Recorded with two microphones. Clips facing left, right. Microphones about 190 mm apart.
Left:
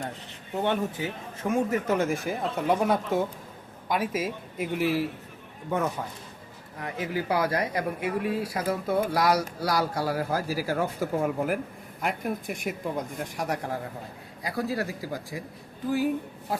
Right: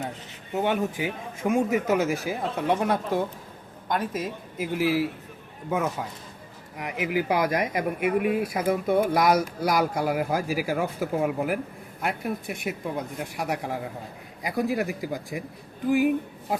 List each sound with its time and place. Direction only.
0.5 s speech: 10° right (ahead or behind)
6.7 s speech: 15° right (ahead or behind)